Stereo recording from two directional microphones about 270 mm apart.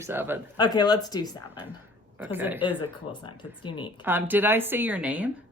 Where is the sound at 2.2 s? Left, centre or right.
Centre.